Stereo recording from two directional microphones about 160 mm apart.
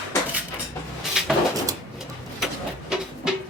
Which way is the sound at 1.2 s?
5° right (ahead or behind).